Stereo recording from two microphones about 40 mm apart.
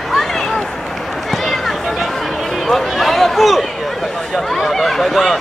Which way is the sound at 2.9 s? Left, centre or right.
Centre.